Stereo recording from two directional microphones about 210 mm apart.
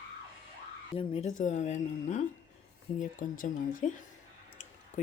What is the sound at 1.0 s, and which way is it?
Speech, 30° left (ahead or behind).